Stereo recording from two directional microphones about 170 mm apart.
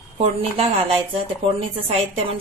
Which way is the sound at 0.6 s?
35° right (ahead or behind).